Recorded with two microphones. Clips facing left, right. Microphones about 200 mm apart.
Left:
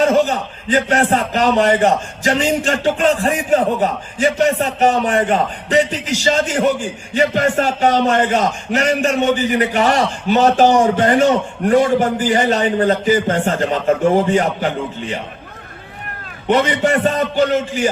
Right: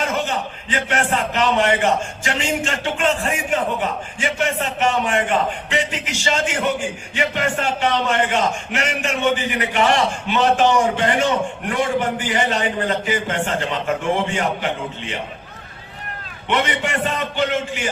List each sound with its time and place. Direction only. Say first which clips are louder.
0.0 s a man's voice: left 9 dB; 40° left (ahead or behind)
16.5 s a man's voice: left 7 dB; 40° left (ahead or behind)